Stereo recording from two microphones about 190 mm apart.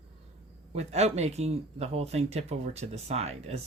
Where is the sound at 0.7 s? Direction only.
35° right (ahead or behind).